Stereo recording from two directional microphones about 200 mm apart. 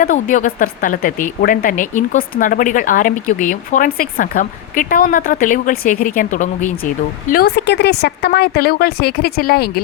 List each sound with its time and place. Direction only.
0.0 s speech: 40° left (ahead or behind)
7.3 s a woman's voice: 50° left (ahead or behind)